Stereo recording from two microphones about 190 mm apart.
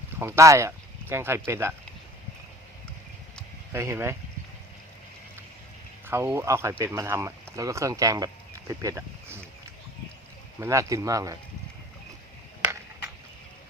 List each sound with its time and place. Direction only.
0.2 s speech: 15° right (ahead or behind)
3.7 s speech: 15° right (ahead or behind)
6.1 s speech: 10° right (ahead or behind)
10.6 s speech: 15° right (ahead or behind)